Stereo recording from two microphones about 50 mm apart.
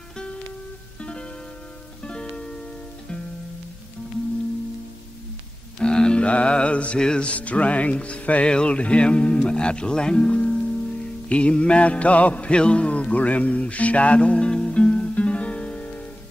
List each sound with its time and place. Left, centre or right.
2.0 s music: centre
5.8 s music: centre